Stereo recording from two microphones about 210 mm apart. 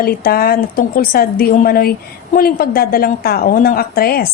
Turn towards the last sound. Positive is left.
turn(degrees=45)  # may be behind; listen again after turning